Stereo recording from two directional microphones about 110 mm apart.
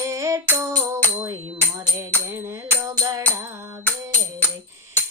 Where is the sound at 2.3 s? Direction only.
25° right (ahead or behind).